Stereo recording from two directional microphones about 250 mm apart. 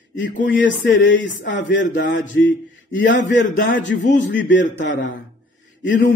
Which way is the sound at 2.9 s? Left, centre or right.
Left.